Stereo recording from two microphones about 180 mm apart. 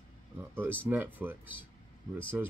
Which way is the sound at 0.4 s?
10° right (ahead or behind).